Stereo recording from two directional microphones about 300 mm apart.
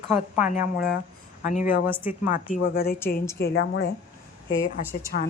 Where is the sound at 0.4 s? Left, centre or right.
Left.